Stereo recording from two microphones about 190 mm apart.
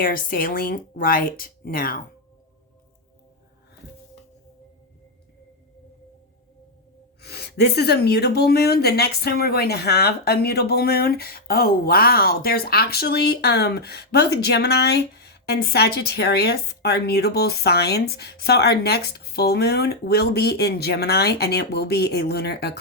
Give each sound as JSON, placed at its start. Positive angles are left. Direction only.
{"t": 0.0, "sound": "speech", "side_deg": 50}
{"t": 7.2, "sound": "speech", "side_deg": 60}